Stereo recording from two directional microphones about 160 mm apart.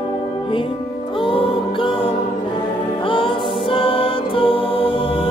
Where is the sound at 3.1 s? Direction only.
35° left (ahead or behind).